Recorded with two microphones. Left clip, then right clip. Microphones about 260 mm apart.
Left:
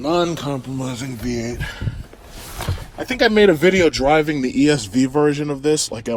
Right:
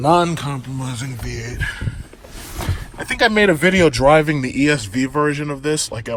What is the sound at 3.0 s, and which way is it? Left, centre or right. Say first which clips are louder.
Speech: left 1 dB; centre.